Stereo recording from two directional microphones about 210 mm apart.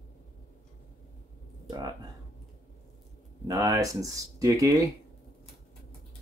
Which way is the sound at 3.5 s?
15° right (ahead or behind).